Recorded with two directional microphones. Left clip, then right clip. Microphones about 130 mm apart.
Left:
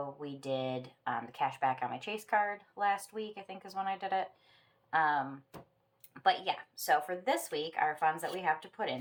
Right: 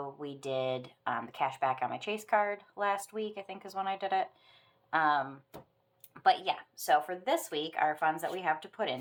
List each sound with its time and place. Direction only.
0.2 s speech: 35° right (ahead or behind)